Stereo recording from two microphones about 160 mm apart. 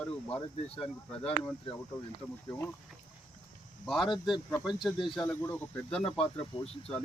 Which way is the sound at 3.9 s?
Centre (ahead or behind).